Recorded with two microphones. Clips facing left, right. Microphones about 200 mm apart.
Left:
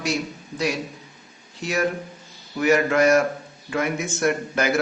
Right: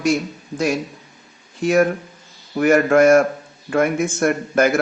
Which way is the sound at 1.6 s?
50° right (ahead or behind).